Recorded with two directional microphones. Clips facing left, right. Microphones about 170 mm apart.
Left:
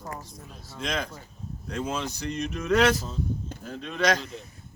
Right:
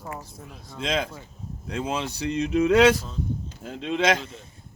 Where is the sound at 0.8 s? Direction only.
25° right (ahead or behind).